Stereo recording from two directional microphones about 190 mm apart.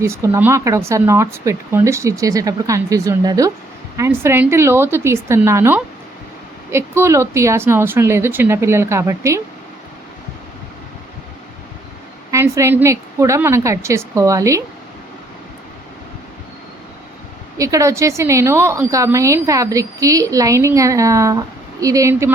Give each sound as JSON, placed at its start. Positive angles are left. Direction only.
{"t": 0.0, "sound": "a woman's voice", "side_deg": -15}
{"t": 12.3, "sound": "a woman's voice", "side_deg": -15}
{"t": 17.6, "sound": "a woman's voice", "side_deg": -15}